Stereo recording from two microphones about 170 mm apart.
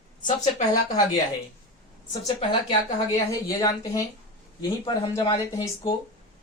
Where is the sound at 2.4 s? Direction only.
25° left (ahead or behind).